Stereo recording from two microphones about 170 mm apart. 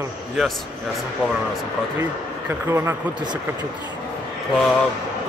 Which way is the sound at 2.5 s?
15° right (ahead or behind).